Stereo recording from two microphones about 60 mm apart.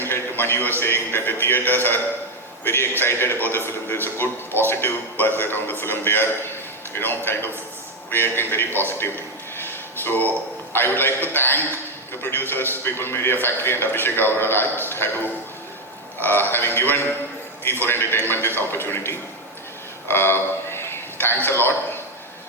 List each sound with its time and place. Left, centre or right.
0.0 s a man's voice: left
9.6 s a sound: left
10.7 s a man's voice: left